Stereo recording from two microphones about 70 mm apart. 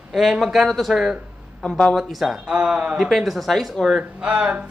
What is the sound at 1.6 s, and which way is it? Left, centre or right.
Speech, centre.